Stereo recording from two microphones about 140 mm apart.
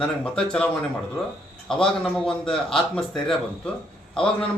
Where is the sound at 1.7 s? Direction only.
5° left (ahead or behind).